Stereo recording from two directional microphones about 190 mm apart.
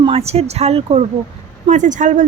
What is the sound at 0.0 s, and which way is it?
A woman's voice, 30° right (ahead or behind).